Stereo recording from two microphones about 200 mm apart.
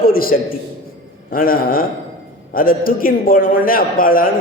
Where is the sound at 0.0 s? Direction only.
45° left (ahead or behind).